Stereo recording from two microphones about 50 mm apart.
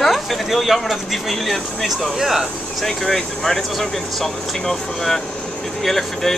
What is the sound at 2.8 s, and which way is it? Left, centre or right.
Speech, centre.